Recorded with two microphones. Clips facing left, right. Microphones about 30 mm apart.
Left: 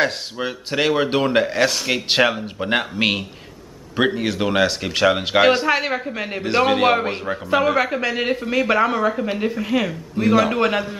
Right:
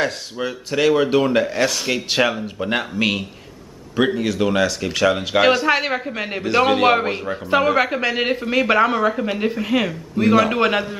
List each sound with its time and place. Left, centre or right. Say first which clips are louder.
0.0 s speech: left 1 dB; centre
5.7 s a man's voice: right 1 dB; centre